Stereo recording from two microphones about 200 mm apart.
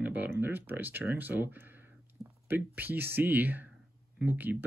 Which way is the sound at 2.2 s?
20° right (ahead or behind).